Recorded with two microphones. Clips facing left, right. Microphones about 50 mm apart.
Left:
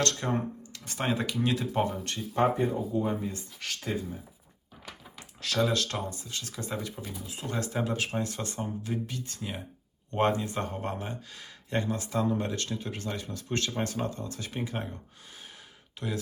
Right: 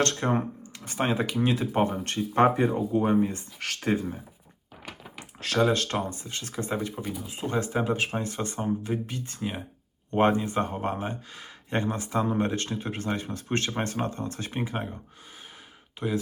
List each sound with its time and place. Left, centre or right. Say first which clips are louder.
0.0 s speech: right 4 dB; right
2.6 s speech: right 4 dB; right
3.0 s speech: right 7 dB; right
5.5 s speech: right 4 dB; right
16.0 s speech: right 5 dB; centre